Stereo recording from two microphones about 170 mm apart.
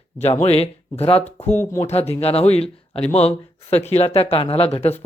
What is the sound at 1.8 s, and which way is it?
Speech, 35° left (ahead or behind).